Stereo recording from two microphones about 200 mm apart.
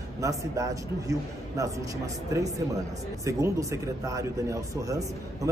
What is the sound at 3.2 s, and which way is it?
A man's voice, 15° right (ahead or behind).